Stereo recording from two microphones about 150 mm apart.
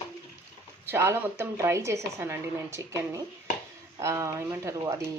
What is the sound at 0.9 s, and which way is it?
A woman's voice, 15° right (ahead or behind).